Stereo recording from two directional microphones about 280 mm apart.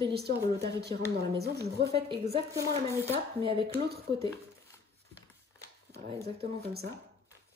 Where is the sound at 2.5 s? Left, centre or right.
Centre.